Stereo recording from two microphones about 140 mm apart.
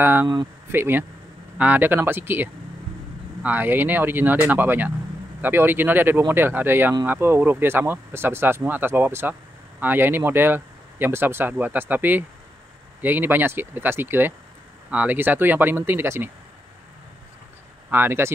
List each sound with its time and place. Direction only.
0.0 s speech: 15° right (ahead or behind)
17.8 s speech: 15° right (ahead or behind)